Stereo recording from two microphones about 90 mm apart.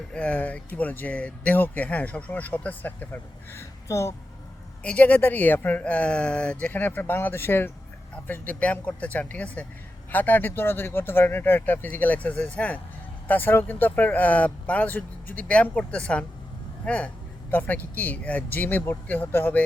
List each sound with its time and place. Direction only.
0.1 s speech: 15° left (ahead or behind)
3.8 s speech: 35° left (ahead or behind)
4.8 s speech: 15° left (ahead or behind)